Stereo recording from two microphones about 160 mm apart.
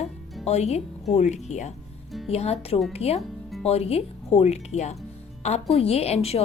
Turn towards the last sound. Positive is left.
turn(degrees=40)  # may be behind; listen again after turning